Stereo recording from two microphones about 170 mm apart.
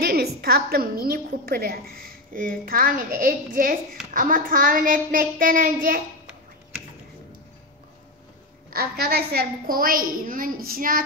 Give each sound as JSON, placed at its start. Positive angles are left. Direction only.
{"t": 0.0, "sound": "a woman's voice", "side_deg": -70}
{"t": 8.6, "sound": "a woman's voice", "side_deg": -65}